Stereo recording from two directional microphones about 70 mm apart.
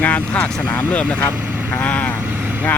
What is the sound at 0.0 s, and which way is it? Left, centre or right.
Speech, left.